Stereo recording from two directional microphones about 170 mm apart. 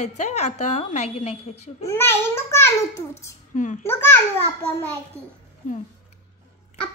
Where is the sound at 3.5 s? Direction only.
50° left (ahead or behind).